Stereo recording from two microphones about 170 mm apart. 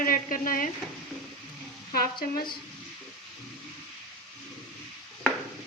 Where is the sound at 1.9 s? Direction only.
60° left (ahead or behind).